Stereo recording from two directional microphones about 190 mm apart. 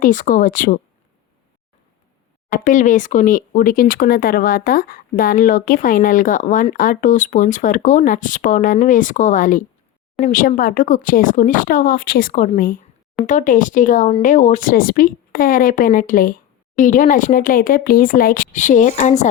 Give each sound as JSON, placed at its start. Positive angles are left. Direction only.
{"t": 0.0, "sound": "speech", "side_deg": 45}
{"t": 2.5, "sound": "speech", "side_deg": 45}